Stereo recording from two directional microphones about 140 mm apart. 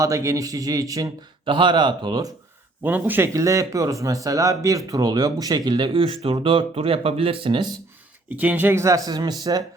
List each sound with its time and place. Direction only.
0.0 s speech: 20° right (ahead or behind)
1.5 s speech: 35° right (ahead or behind)
2.8 s speech: 15° right (ahead or behind); by 7.7 s 40° right (ahead or behind)
8.4 s speech: 10° right (ahead or behind); by 9.6 s 30° right (ahead or behind)